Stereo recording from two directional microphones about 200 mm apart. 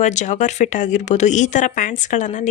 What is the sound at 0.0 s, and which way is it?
Speech, 35° left (ahead or behind).